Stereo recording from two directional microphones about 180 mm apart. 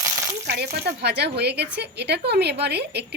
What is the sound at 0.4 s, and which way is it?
Speech, 60° right (ahead or behind).